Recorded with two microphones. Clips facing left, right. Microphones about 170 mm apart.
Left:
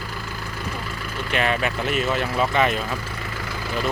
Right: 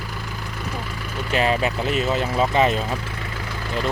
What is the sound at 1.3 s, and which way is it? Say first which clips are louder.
Speech: right 2 dB; 30° right (ahead or behind).